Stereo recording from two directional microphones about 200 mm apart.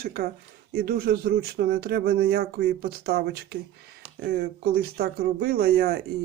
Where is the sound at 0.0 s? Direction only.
50° right (ahead or behind).